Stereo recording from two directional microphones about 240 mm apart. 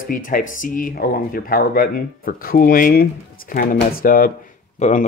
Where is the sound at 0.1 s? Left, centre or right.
Left.